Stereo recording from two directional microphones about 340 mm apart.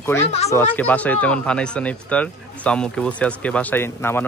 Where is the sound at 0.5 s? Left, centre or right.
Centre.